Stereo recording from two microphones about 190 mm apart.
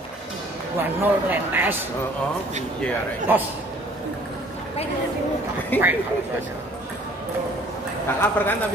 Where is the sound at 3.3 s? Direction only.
10° right (ahead or behind).